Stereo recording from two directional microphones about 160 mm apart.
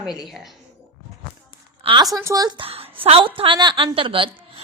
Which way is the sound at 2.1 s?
20° right (ahead or behind).